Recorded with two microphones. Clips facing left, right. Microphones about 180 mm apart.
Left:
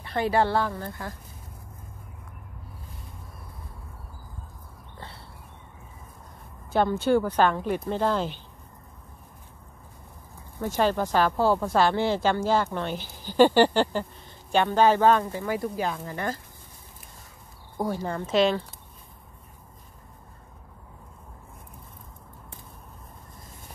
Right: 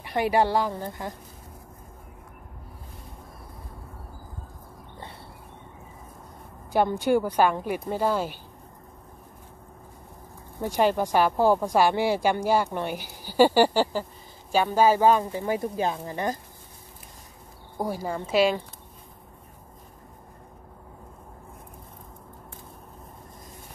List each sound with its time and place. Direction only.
0.0 s speech: 15° right (ahead or behind)
6.7 s speech: 15° right (ahead or behind)
10.6 s speech: 15° right (ahead or behind)
15.4 s speech: 20° right (ahead or behind)
17.7 s speech: 10° right (ahead or behind)